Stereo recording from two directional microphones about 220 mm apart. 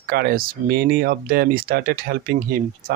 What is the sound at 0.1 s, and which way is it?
Speech, 40° right (ahead or behind).